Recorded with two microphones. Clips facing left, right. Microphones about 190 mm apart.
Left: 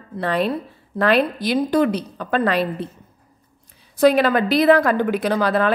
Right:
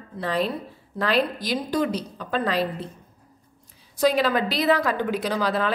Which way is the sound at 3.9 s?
60° left (ahead or behind).